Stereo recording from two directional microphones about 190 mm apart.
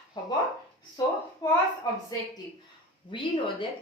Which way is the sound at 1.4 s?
20° left (ahead or behind).